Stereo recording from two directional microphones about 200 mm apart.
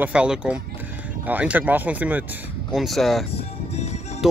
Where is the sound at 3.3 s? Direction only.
30° left (ahead or behind).